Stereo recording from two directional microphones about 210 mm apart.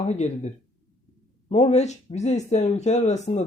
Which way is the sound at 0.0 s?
35° left (ahead or behind).